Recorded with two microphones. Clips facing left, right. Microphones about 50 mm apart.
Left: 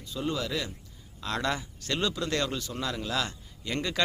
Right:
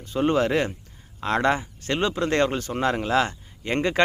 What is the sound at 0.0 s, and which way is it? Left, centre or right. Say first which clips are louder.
Speech: right 10 dB; right.